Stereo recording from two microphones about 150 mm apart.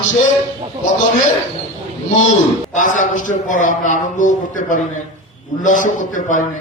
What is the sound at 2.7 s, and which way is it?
A man's voice, 55° left (ahead or behind).